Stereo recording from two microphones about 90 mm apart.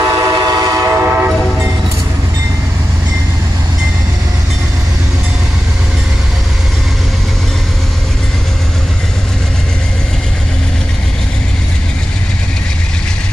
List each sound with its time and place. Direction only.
0.0 s train: 50° right (ahead or behind)
0.9 s train: 25° right (ahead or behind)